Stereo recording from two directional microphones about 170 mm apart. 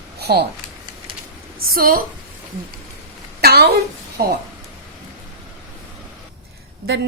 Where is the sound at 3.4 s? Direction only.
70° right (ahead or behind).